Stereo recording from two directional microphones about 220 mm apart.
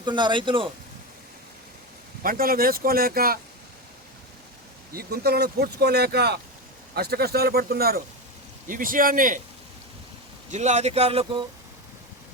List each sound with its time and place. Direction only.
0.0 s speech: 20° right (ahead or behind)
2.2 s speech: 40° right (ahead or behind)
4.9 s speech: 45° right (ahead or behind)
10.5 s speech: 30° right (ahead or behind)